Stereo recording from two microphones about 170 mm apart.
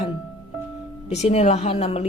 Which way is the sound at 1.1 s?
40° left (ahead or behind).